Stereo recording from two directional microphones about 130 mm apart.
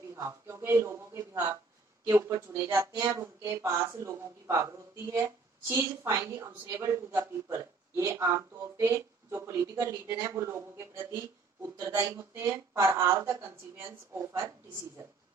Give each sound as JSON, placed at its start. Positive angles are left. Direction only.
{"t": 0.2, "sound": "speech", "side_deg": -20}